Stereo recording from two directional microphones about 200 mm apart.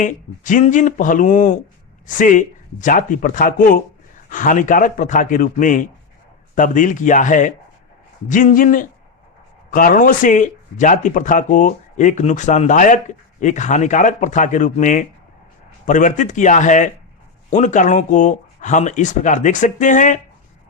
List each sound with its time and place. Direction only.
0.0 s speech: 40° left (ahead or behind)